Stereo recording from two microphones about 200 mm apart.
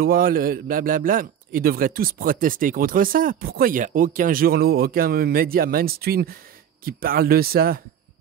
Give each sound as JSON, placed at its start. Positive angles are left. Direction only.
{"t": 0.0, "sound": "a man's voice", "side_deg": -45}